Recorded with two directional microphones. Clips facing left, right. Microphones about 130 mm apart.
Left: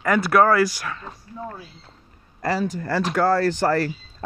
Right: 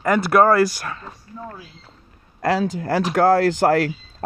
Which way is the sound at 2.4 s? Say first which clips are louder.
Right 3 dB; 60° right (ahead or behind).